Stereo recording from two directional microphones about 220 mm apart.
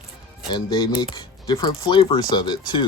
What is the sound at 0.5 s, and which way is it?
Speech, 15° left (ahead or behind).